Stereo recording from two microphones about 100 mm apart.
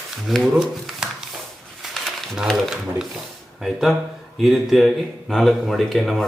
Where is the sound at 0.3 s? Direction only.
Centre (ahead or behind).